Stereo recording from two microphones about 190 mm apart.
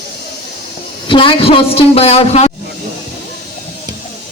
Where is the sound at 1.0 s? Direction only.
25° left (ahead or behind).